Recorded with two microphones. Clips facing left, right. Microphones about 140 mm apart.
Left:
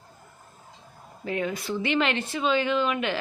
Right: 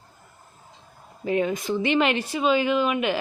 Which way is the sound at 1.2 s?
20° right (ahead or behind).